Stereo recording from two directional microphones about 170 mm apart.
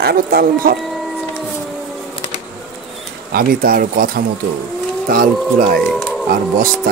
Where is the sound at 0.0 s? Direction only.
65° right (ahead or behind).